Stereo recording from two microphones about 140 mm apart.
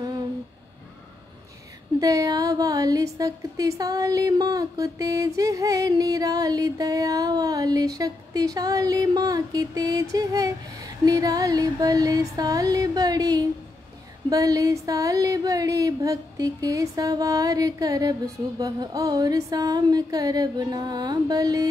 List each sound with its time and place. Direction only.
2.0 s speech: 25° right (ahead or behind)